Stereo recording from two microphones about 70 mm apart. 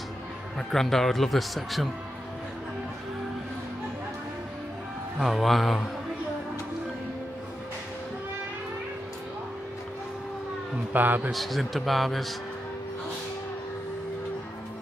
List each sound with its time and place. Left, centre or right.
0.6 s speech: centre
5.2 s speech: centre
10.9 s speech: right
11.3 s speech: centre